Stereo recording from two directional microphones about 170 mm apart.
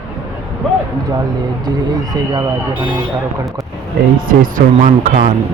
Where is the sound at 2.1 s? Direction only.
20° right (ahead or behind).